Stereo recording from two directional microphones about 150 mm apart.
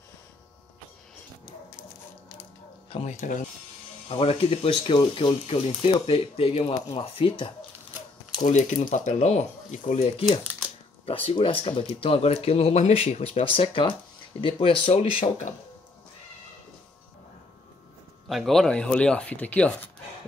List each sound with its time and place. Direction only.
2.9 s speech: 45° left (ahead or behind)
4.1 s speech: 40° left (ahead or behind)
8.5 s speech: 55° left (ahead or behind)
18.3 s speech: centre (ahead or behind)